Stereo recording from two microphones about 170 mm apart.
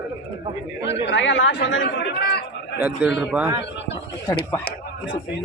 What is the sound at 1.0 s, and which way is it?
Speech, 90° left.